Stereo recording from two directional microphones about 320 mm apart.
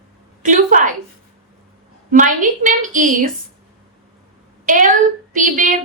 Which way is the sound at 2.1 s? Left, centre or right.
Right.